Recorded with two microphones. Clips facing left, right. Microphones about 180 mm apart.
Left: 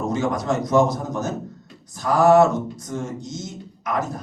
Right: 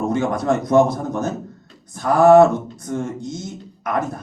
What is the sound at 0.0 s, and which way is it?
A man's voice, 55° right (ahead or behind).